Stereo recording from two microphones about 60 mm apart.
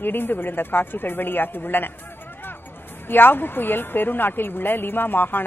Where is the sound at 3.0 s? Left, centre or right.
Left.